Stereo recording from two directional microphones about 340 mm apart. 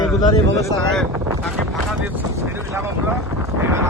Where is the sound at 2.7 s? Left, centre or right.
Centre.